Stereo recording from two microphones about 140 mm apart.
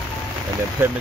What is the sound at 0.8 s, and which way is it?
Speech, 15° right (ahead or behind).